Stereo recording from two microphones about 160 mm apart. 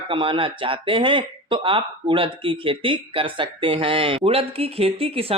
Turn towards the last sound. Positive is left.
turn(degrees=-35)  # may be behind; listen again after turning